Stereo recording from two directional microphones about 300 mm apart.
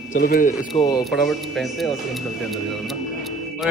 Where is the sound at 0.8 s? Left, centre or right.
Centre.